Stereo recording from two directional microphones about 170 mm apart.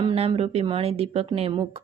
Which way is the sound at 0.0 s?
35° right (ahead or behind).